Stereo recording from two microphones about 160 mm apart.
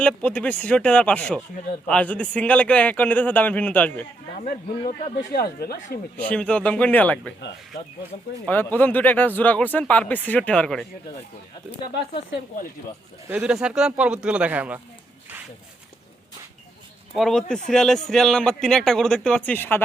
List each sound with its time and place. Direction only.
0.0 s speech: 5° left (ahead or behind)
5.1 s speech: 75° left (ahead or behind)
6.1 s speech: 5° left (ahead or behind)
8.4 s speech: 10° left (ahead or behind)
13.2 s speech: 10° right (ahead or behind)
17.2 s a man's voice: centre (ahead or behind)